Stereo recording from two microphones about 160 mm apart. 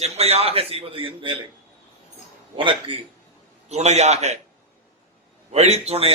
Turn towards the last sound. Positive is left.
turn(degrees=-40)  # may be behind; listen again after turning